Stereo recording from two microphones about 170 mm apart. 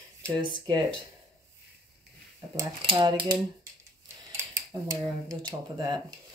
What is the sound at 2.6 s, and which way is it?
Speech, 25° right (ahead or behind).